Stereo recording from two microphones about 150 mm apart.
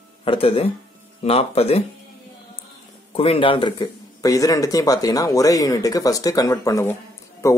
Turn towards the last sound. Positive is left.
turn(degrees=20)  # may be behind; listen again after turning